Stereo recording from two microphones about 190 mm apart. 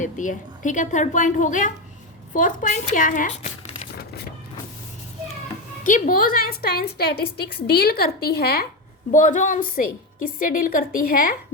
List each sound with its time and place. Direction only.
0.0 s a woman's voice: 40° left (ahead or behind)
5.8 s a woman's voice: 45° left (ahead or behind)
9.1 s a woman's voice: 40° left (ahead or behind)